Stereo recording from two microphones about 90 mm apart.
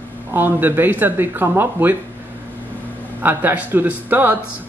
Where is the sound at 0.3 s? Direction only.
20° right (ahead or behind).